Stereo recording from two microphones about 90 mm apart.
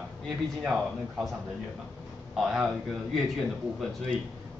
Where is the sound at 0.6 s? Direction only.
10° right (ahead or behind).